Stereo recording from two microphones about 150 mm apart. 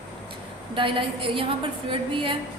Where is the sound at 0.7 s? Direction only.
35° right (ahead or behind).